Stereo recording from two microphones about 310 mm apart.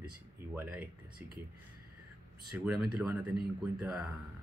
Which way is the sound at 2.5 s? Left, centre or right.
Centre.